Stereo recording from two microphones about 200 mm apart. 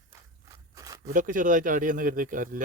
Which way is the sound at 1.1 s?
40° right (ahead or behind).